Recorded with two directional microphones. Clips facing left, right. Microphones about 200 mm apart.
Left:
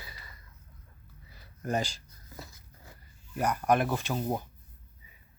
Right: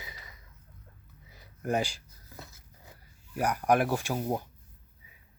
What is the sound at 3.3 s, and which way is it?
Speech, 10° right (ahead or behind).